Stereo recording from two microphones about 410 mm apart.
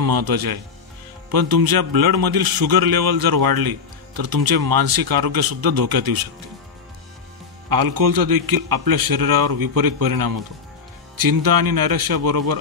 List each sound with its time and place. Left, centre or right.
0.0 s a man's voice: right
7.7 s a man's voice: right